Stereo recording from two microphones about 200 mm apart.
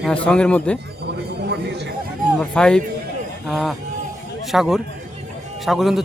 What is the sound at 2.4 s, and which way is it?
A man's voice, 5° left (ahead or behind).